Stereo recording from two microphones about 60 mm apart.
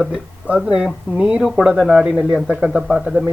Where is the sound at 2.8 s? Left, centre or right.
Centre.